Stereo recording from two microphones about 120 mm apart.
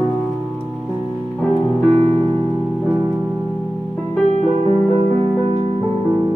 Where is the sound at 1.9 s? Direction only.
50° right (ahead or behind).